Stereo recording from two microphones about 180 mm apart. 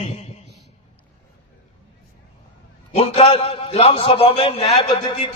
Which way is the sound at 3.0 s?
35° left (ahead or behind).